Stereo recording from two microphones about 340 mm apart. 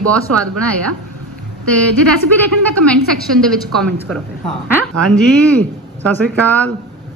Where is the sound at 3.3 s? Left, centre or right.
Centre.